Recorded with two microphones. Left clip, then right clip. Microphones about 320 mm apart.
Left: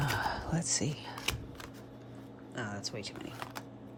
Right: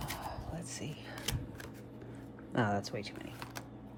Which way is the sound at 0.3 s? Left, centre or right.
Left.